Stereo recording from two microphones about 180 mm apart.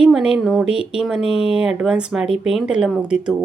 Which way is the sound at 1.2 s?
35° left (ahead or behind).